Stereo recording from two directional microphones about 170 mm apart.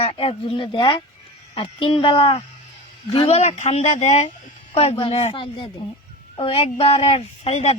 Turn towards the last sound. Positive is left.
turn(degrees=40)  # may be behind; listen again after turning